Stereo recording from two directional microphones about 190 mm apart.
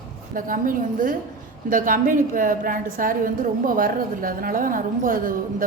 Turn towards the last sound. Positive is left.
turn(degrees=-45)  # may be behind; listen again after turning